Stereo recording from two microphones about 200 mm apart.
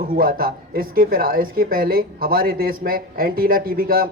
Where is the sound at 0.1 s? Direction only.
45° right (ahead or behind).